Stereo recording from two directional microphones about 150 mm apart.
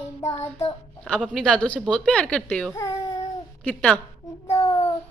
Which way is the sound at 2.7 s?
20° left (ahead or behind).